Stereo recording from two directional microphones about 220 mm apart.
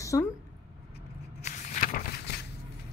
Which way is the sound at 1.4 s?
35° left (ahead or behind).